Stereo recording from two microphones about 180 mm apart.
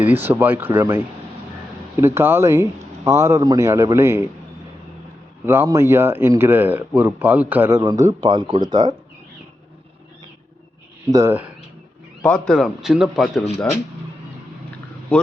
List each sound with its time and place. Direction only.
0.0 s speech: 10° right (ahead or behind)
5.5 s speech: 15° right (ahead or behind)
11.0 s speech: 15° right (ahead or behind)
12.2 s a man's voice: 5° left (ahead or behind)